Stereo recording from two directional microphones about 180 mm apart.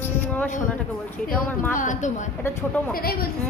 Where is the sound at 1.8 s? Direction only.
45° left (ahead or behind).